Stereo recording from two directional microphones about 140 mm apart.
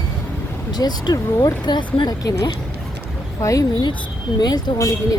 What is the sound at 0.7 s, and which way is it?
Speech, 30° left (ahead or behind).